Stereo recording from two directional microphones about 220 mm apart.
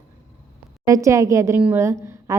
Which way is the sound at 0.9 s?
15° right (ahead or behind).